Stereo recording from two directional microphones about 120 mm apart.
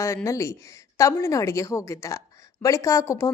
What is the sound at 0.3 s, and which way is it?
A woman's voice, 25° left (ahead or behind).